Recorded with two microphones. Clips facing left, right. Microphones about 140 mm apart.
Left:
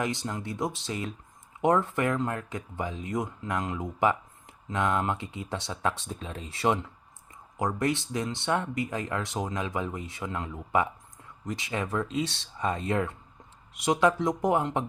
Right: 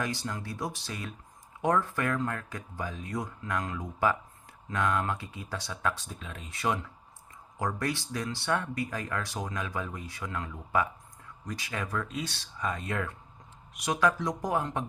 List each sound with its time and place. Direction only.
0.0 s speech: 20° left (ahead or behind)